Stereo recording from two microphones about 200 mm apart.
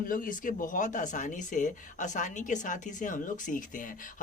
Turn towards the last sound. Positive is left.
turn(degrees=40)  # may be behind; listen again after turning